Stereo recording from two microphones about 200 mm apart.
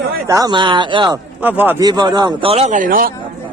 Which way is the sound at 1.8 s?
20° right (ahead or behind).